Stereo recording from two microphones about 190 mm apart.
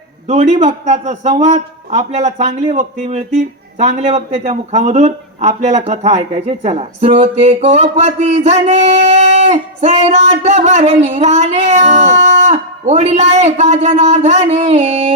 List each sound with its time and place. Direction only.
0.3 s a man's voice: 35° right (ahead or behind)